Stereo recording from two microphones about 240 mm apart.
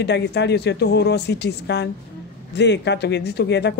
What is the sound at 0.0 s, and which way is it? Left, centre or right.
Speech, left.